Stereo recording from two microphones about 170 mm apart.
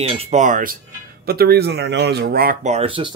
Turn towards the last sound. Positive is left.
turn(degrees=-30)  # may be behind; listen again after turning